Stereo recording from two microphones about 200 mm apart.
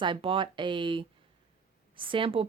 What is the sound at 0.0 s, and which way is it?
Speech, 25° right (ahead or behind).